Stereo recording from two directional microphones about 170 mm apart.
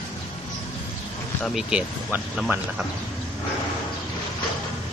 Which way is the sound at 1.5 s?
Centre (ahead or behind).